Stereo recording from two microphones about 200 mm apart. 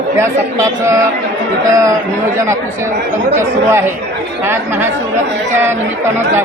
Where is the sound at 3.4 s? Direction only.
10° right (ahead or behind).